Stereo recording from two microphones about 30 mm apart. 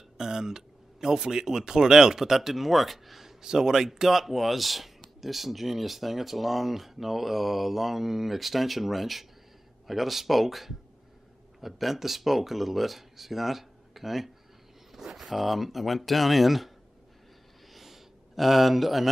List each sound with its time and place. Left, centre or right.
0.2 s speech: centre
2.2 s speech: centre
17.7 s a sound: centre